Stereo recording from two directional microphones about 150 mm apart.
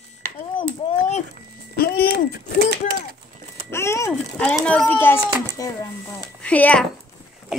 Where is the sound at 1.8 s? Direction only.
90° left.